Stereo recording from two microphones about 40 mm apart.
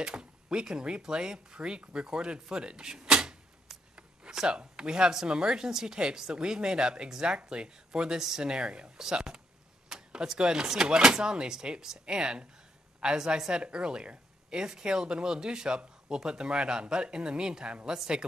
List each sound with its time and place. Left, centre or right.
0.0 s speech: right